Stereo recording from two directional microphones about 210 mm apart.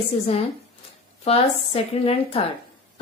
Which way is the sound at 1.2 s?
30° left (ahead or behind).